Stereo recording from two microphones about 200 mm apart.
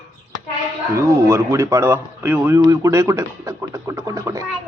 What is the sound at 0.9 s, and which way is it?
Speech, 15° right (ahead or behind).